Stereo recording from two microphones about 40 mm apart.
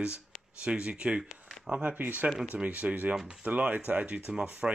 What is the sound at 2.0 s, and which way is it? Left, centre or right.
Speech, right.